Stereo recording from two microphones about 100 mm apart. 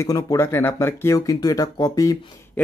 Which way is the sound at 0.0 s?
30° left (ahead or behind).